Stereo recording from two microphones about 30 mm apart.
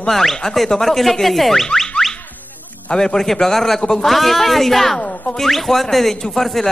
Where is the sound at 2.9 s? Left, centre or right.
Left.